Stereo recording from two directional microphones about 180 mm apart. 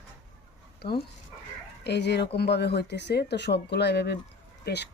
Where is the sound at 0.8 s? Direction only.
65° left (ahead or behind).